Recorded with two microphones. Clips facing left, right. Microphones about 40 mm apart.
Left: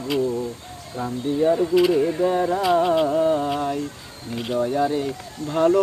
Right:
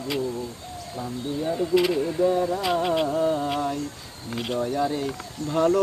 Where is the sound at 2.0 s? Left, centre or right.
Left.